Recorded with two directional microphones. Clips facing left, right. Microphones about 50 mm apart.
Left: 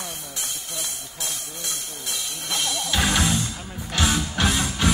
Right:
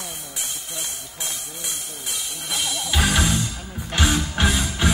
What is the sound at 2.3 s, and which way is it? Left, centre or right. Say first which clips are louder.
Music: even; centre.